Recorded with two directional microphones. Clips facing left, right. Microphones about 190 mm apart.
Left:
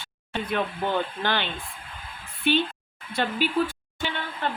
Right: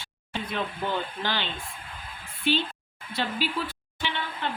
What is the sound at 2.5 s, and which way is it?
A woman's voice, 55° left (ahead or behind).